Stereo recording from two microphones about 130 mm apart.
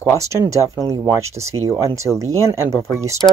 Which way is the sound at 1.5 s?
25° right (ahead or behind).